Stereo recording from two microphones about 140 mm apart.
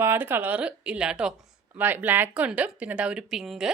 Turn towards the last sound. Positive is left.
turn(degrees=-5)  # may be behind; listen again after turning